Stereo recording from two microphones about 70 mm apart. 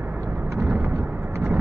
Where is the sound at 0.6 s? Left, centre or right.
Right.